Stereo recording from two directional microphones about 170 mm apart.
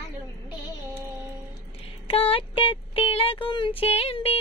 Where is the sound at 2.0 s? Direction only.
35° left (ahead or behind).